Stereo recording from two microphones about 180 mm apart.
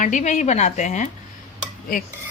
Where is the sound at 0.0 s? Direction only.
45° left (ahead or behind).